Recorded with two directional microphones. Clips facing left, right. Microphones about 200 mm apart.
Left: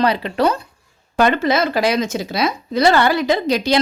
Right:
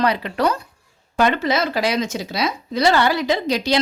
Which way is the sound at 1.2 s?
50° left (ahead or behind).